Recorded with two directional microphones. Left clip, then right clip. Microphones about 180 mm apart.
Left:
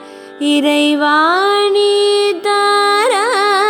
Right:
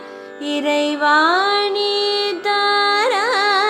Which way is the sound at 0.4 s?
55° left (ahead or behind).